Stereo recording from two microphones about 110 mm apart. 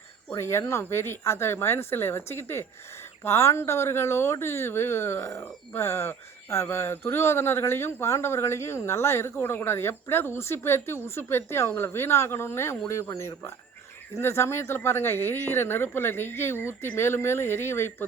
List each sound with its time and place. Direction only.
0.3 s speech: 25° left (ahead or behind)